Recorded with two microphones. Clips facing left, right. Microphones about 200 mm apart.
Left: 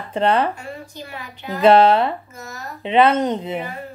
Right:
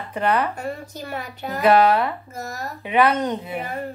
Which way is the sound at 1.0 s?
45° right (ahead or behind).